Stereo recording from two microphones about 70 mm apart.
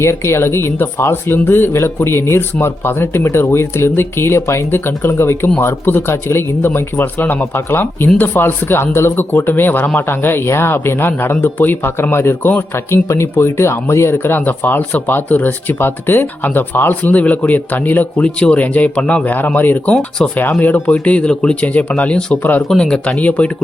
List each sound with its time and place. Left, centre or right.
0.0 s speech: left
19.9 s speech: centre
20.4 s speech: left
22.7 s speech: centre